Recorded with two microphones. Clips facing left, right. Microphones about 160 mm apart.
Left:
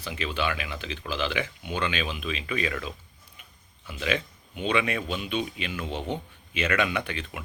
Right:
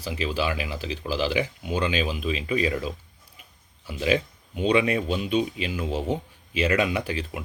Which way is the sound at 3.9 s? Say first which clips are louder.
Right 5 dB; 35° right (ahead or behind).